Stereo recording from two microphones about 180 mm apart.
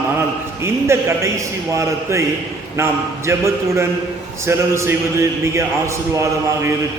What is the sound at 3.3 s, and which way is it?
A man's voice, 15° right (ahead or behind).